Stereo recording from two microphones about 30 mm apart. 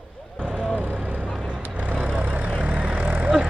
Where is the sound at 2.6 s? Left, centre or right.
Right.